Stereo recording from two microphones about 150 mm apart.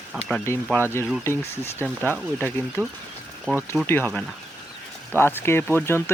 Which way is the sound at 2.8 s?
15° left (ahead or behind).